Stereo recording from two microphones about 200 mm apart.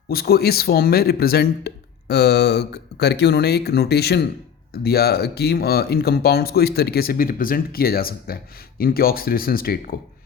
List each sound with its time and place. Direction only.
0.1 s speech: 50° left (ahead or behind)